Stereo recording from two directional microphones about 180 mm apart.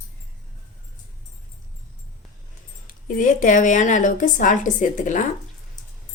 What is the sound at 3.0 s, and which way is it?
Speech, 50° left (ahead or behind).